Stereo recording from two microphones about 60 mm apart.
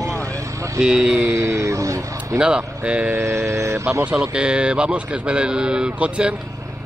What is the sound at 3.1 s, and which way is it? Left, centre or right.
Speech, right.